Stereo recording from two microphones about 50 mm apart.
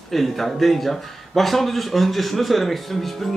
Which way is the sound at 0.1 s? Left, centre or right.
Centre.